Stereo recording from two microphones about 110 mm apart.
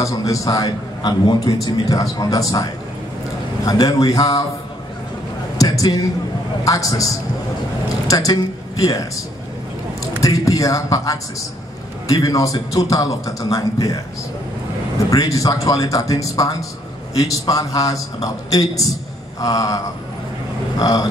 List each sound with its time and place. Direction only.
0.0 s a man's voice: 30° left (ahead or behind)
5.6 s a sound: 35° left (ahead or behind)
6.6 s a man's voice: 30° left (ahead or behind)
10.2 s a man's voice: 30° left (ahead or behind)
15.0 s a man's voice: 30° left (ahead or behind)
20.8 s a man's voice: 35° left (ahead or behind)